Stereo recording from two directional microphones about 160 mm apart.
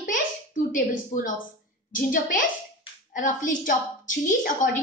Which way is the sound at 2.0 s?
60° left (ahead or behind).